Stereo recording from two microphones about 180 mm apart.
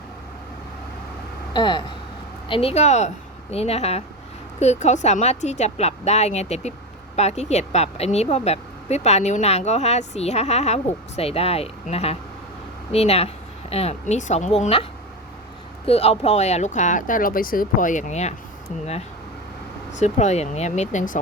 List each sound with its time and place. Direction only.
1.5 s speech: 25° left (ahead or behind)
15.9 s speech: 35° left (ahead or behind)
20.0 s speech: 40° left (ahead or behind)